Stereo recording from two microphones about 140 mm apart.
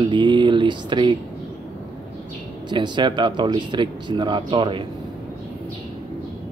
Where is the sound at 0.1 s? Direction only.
35° right (ahead or behind).